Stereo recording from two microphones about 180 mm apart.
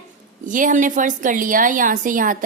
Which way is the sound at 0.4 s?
45° right (ahead or behind).